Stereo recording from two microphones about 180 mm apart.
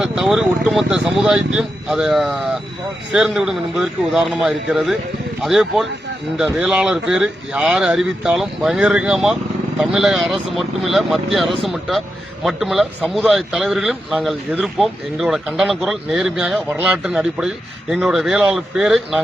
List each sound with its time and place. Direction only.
0.0 s a man's voice: centre (ahead or behind)